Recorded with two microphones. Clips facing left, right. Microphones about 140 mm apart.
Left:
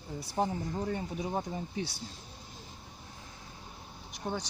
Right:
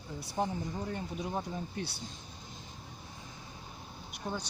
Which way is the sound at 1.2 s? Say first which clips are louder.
Left 2 dB; 15° left (ahead or behind).